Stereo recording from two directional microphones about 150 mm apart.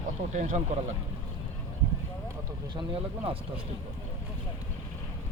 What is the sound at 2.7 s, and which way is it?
Speech, 35° right (ahead or behind).